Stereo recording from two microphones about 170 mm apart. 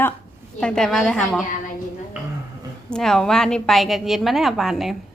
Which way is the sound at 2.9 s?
Centre (ahead or behind).